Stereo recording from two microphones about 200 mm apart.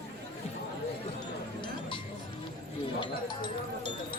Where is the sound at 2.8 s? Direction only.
25° left (ahead or behind).